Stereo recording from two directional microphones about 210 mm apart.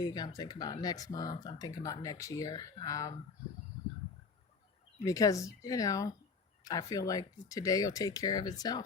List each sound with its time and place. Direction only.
0.0 s speech: 20° left (ahead or behind)
5.0 s speech: 15° left (ahead or behind)